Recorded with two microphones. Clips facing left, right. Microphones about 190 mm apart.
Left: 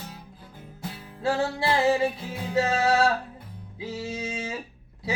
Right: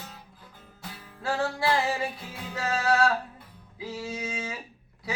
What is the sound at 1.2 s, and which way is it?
Music, 25° left (ahead or behind).